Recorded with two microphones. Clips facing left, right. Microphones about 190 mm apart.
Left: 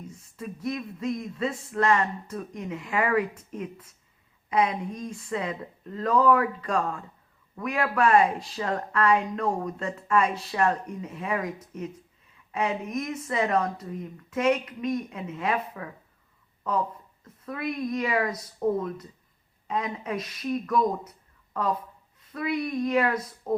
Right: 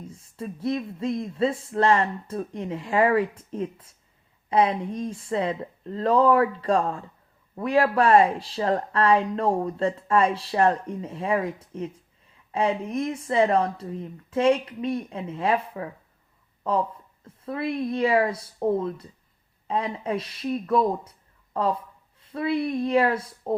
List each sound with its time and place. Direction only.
0.1 s speech: 30° right (ahead or behind)